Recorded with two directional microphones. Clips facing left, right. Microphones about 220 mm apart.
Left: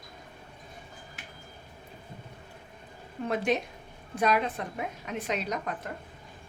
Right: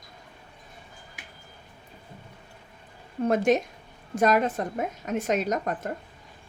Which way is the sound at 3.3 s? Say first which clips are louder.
Right 6 dB; 45° right (ahead or behind).